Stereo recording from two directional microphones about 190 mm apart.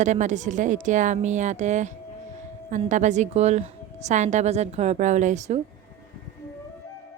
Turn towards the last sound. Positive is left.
turn(degrees=-35)  # may be behind; listen again after turning